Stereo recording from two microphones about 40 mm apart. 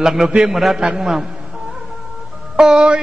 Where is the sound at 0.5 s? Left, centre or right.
Centre.